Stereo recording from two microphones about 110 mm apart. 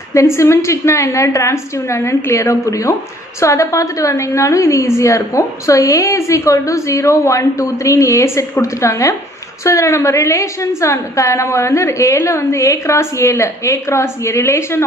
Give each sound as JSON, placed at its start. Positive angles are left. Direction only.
{"t": 0.1, "sound": "a woman's voice", "side_deg": 25}